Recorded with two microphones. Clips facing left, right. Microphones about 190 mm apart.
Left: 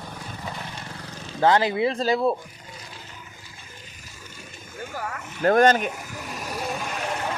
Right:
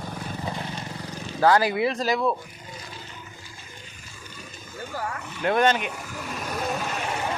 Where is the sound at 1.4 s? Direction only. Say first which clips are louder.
Even; 20° left (ahead or behind).